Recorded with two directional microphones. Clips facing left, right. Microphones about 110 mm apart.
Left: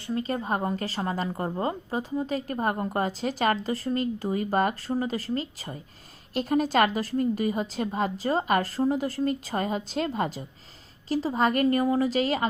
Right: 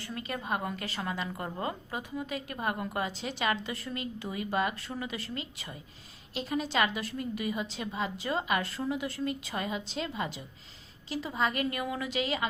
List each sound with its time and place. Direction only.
0.0 s a woman's voice: 30° left (ahead or behind)